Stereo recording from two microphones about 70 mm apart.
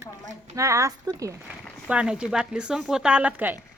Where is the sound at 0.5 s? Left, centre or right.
Right.